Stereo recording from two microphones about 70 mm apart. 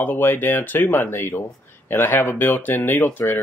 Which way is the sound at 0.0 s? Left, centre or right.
Left.